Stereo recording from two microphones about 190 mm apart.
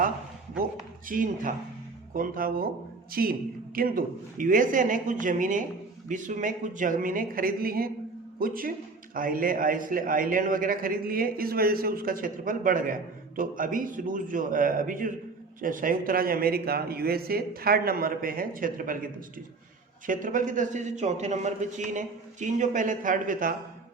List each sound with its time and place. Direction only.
1.0 s a man's voice: 45° right (ahead or behind)
20.1 s a man's voice: 45° right (ahead or behind)